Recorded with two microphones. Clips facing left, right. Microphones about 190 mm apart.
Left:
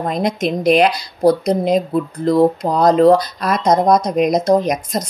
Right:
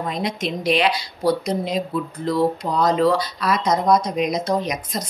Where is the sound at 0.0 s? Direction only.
45° left (ahead or behind).